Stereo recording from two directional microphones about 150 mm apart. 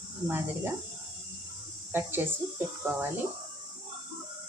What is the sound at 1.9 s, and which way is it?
Speech, 15° right (ahead or behind).